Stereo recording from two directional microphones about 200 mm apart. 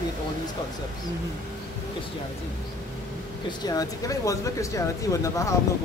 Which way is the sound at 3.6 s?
20° left (ahead or behind).